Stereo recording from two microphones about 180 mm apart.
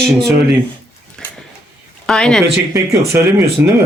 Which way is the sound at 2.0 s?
5° left (ahead or behind).